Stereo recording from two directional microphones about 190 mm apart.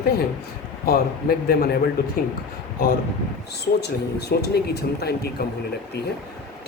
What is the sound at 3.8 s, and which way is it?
Speech, 60° left (ahead or behind).